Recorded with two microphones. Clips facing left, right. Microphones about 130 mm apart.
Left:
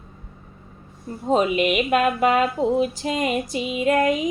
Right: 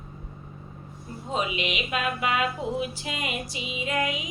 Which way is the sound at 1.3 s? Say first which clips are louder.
Left 10 dB; 45° left (ahead or behind).